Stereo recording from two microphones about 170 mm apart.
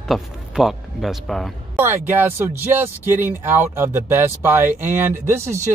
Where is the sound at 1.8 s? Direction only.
15° right (ahead or behind).